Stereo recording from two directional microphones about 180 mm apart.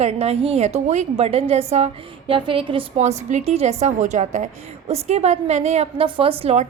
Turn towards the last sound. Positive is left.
turn(degrees=-35)  # may be behind; listen again after turning